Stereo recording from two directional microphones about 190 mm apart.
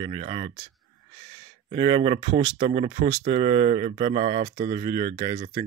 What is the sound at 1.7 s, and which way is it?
Speech, 30° right (ahead or behind).